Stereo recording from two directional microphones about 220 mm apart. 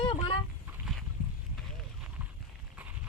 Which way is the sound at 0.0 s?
25° left (ahead or behind).